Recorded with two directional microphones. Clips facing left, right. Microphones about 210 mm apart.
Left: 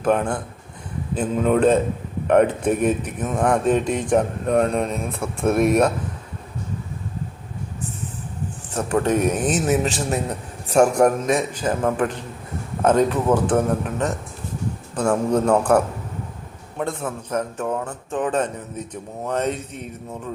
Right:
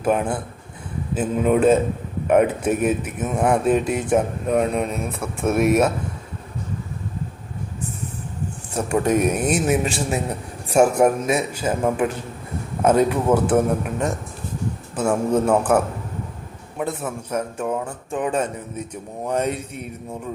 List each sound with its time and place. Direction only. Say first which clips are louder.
0.0 s speech: left 1 dB; 5° right (ahead or behind)
8.7 s speech: right 1 dB; 10° right (ahead or behind)